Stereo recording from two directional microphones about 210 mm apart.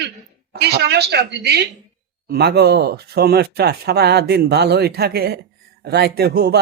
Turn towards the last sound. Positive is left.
turn(degrees=-50)  # may be behind; listen again after turning